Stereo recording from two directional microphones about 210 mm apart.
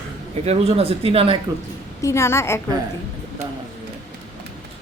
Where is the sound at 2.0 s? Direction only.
15° left (ahead or behind).